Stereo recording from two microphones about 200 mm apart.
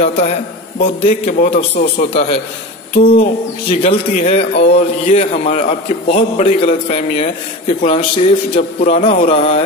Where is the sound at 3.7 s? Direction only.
30° left (ahead or behind).